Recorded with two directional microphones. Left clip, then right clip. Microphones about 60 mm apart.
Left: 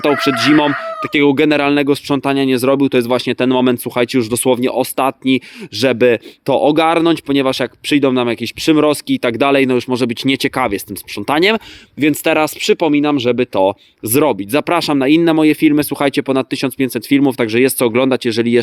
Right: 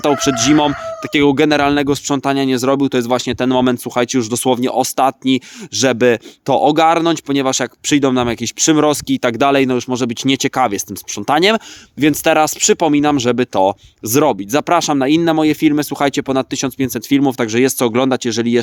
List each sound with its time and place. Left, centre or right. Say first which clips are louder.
0.0 s speech: left 1 dB; right
5.7 s speech: even; centre
6.0 s speech: left 1 dB; right
7.9 s speech: left 1 dB; right
8.6 s speech: even; right
9.0 s speech: even; right
9.6 s speech: left 2 dB; centre
10.2 s speech: right 1 dB; right
10.7 s speech: left 1 dB; right
13.5 s speech: even; right
14.0 s speech: even; right
16.2 s speech: left 1 dB; centre
16.9 s speech: left 1 dB; right